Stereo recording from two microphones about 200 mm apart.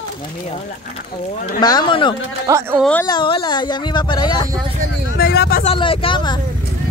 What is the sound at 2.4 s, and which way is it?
Speech, 15° right (ahead or behind).